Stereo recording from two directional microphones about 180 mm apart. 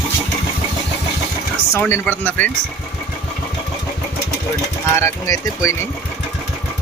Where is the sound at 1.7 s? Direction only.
10° left (ahead or behind).